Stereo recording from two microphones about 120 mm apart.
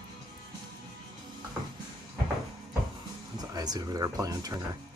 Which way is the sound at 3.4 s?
35° right (ahead or behind).